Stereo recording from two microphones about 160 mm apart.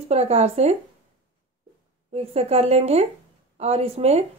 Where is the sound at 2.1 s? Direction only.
40° right (ahead or behind).